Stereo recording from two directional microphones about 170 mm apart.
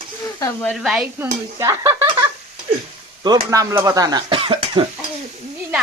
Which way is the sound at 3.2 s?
20° right (ahead or behind).